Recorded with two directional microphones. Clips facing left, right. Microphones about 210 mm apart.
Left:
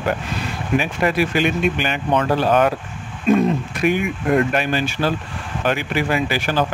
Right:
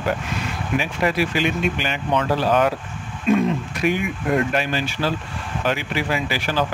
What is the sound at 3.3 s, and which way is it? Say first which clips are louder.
Speech: left 2 dB; 40° left (ahead or behind).